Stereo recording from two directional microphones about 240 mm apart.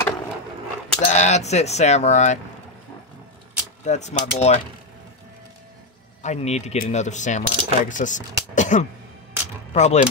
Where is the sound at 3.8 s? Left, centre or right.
Left.